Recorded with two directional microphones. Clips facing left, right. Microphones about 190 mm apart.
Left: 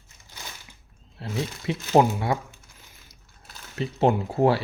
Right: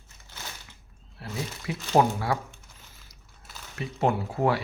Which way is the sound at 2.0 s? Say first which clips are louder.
Left 2 dB; 20° left (ahead or behind).